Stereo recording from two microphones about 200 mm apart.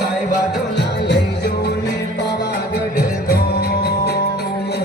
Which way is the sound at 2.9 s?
50° left (ahead or behind).